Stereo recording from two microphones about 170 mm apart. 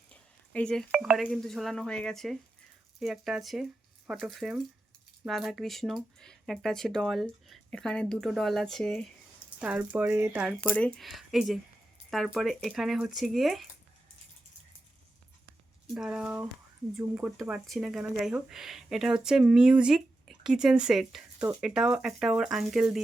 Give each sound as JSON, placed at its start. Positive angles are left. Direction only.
{"t": 0.1, "sound": "speech", "side_deg": 5}
{"t": 9.6, "sound": "speech", "side_deg": -10}
{"t": 10.6, "sound": "speech", "side_deg": 10}
{"t": 16.0, "sound": "speech", "side_deg": -5}